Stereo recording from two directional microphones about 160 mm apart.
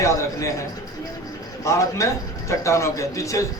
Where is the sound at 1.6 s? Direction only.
20° left (ahead or behind).